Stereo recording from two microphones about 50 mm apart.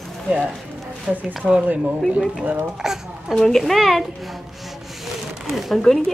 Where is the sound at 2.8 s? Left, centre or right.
Centre.